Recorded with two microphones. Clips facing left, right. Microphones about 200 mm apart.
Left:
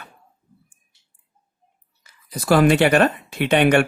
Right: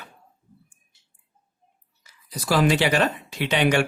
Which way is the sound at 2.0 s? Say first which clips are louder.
Left 4 dB; 55° left (ahead or behind).